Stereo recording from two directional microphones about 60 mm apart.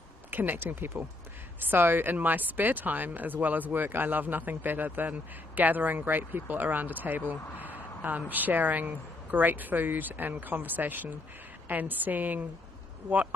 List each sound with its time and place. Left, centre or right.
0.3 s a man's voice: right